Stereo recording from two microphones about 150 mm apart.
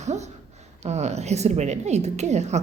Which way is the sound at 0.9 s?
50° right (ahead or behind).